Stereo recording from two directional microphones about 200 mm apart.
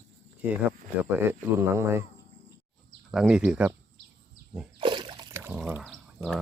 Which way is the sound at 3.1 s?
Centre (ahead or behind).